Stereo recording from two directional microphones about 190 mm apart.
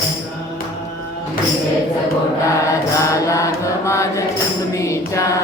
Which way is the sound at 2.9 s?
15° left (ahead or behind).